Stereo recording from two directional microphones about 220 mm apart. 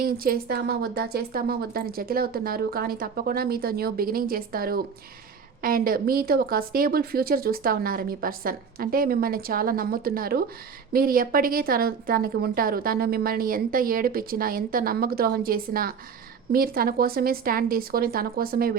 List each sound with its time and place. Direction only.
0.0 s a woman's voice: 40° right (ahead or behind)